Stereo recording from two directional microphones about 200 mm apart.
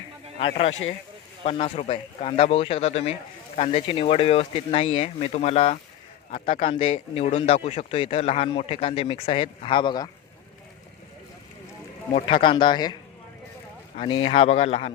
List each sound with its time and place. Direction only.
0.3 s speech: 30° left (ahead or behind)
12.1 s speech: 25° left (ahead or behind)